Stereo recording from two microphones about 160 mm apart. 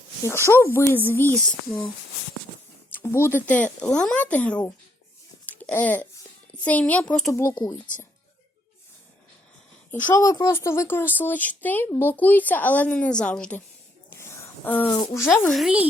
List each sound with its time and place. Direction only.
0.3 s speech: 15° left (ahead or behind)
3.0 s speech: 15° left (ahead or behind)
5.5 s babbling: 10° left (ahead or behind)
6.6 s speech: 10° left (ahead or behind)
7.5 s speech: 25° left (ahead or behind)
9.9 s speech: 15° left (ahead or behind)
14.1 s a sound: 15° left (ahead or behind)
15.4 s speech: centre (ahead or behind)